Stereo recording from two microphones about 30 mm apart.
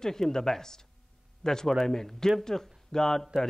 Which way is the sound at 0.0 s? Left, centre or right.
Centre.